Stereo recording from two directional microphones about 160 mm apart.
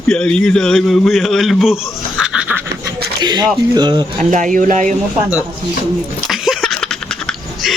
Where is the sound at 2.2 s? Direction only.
5° right (ahead or behind).